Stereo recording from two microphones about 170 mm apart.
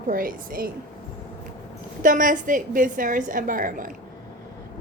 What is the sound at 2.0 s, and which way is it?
A woman's voice, 50° right (ahead or behind).